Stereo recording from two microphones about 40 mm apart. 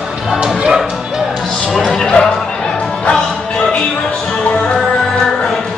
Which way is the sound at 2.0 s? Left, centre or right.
Centre.